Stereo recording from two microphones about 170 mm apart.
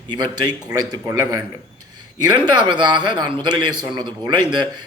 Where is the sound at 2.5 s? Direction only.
25° right (ahead or behind).